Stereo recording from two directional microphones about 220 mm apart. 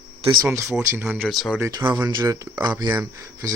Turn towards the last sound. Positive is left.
turn(degrees=-15)  # may be behind; listen again after turning